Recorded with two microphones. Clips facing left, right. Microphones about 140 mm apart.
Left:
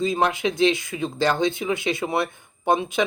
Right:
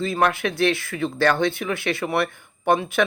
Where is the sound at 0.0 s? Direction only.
20° left (ahead or behind).